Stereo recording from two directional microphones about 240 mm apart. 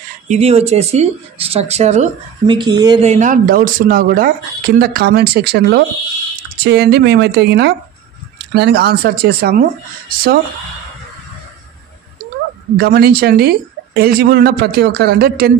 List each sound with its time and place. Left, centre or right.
0.3 s speech: right
3.1 s a woman's voice: right
12.7 s a woman's voice: right